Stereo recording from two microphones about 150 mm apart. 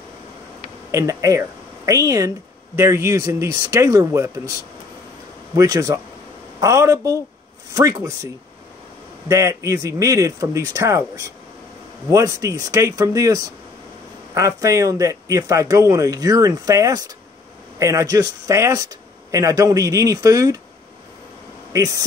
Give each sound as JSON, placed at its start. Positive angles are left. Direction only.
{"t": 0.9, "sound": "speech", "side_deg": -20}
{"t": 5.6, "sound": "speech", "side_deg": -20}
{"t": 9.3, "sound": "speech", "side_deg": -20}
{"t": 21.7, "sound": "speech", "side_deg": -20}